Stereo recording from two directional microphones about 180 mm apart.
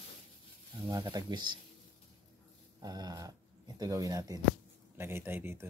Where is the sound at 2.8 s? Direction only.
20° right (ahead or behind).